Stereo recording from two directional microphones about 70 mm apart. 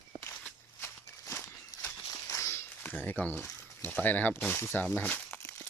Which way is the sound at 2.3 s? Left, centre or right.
Left.